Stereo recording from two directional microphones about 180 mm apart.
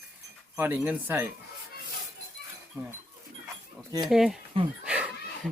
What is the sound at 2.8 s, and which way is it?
Speech, 10° right (ahead or behind).